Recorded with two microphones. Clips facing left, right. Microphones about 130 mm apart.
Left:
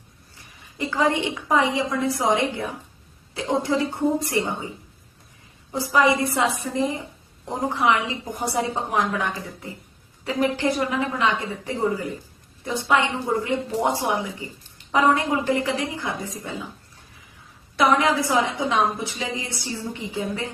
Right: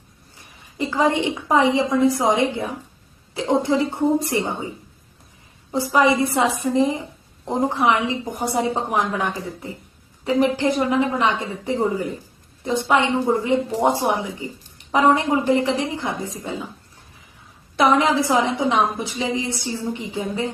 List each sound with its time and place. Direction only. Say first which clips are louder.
0.8 s a woman's voice: right 3 dB; 20° right (ahead or behind)
5.7 s a woman's voice: right 2 dB; 20° right (ahead or behind)
17.7 s a woman's voice: right 2 dB; 20° right (ahead or behind)